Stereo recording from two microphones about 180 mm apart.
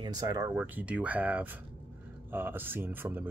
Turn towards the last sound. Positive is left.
turn(degrees=-10)  # may be behind; listen again after turning